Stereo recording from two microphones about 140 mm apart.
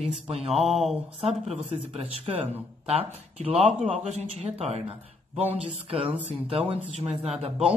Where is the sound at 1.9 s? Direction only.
45° right (ahead or behind).